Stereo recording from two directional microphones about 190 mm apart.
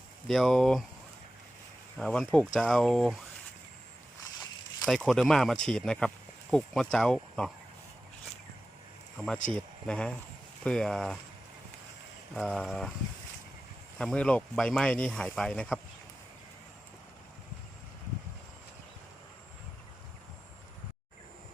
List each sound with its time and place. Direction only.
0.3 s speech: centre (ahead or behind)
2.0 s speech: 5° left (ahead or behind)
4.2 s a sound: 20° left (ahead or behind)
4.9 s speech: centre (ahead or behind)
9.1 s speech: centre (ahead or behind)
12.3 s speech: centre (ahead or behind)
14.0 s speech: 5° left (ahead or behind)